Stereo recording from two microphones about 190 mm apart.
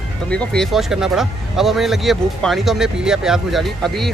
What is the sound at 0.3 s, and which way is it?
Speech, 5° left (ahead or behind).